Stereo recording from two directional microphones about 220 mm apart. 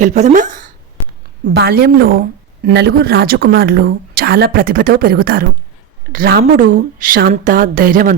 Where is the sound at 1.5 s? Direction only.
45° right (ahead or behind).